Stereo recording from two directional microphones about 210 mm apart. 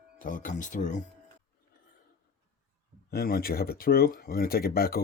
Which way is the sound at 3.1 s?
45° left (ahead or behind).